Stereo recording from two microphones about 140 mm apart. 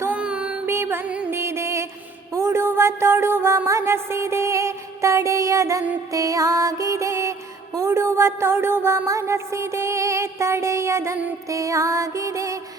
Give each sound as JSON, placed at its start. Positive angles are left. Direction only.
{"t": 0.0, "sound": "music", "side_deg": -10}